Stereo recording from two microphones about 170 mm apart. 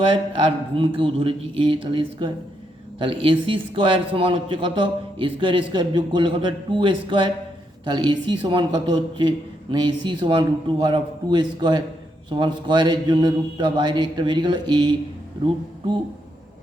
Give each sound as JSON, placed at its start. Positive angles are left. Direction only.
{"t": 0.0, "sound": "a man's voice", "side_deg": -30}